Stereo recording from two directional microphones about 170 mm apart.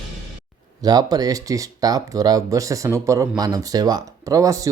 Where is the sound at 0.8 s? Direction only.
25° right (ahead or behind).